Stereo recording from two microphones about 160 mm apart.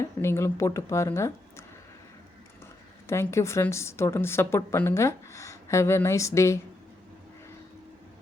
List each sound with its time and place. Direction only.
0.0 s a woman's voice: 15° left (ahead or behind)
3.1 s a woman's voice: 15° left (ahead or behind)